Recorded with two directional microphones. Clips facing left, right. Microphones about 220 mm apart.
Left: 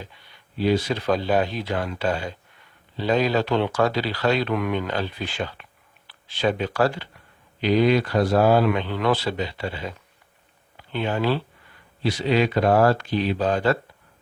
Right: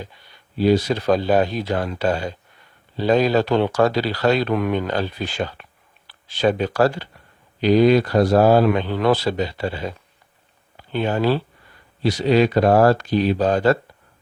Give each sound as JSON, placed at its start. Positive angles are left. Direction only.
{"t": 0.5, "sound": "speech", "side_deg": -40}